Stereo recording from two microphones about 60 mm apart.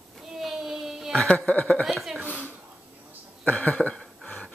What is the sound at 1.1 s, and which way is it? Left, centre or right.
Speech, left.